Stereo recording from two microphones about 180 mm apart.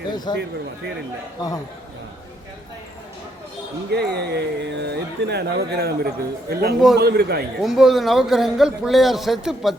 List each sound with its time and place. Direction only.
0.3 s a man's voice: 25° left (ahead or behind)
3.9 s speech: 65° right (ahead or behind)
7.6 s a man's voice: centre (ahead or behind)